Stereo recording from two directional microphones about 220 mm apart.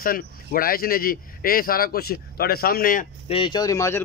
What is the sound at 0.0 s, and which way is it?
Speech, 40° left (ahead or behind).